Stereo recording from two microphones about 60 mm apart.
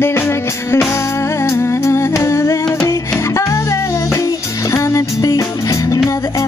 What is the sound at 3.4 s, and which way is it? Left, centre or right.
Music, left.